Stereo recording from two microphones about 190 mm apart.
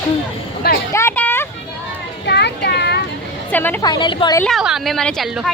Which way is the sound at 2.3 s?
60° left (ahead or behind).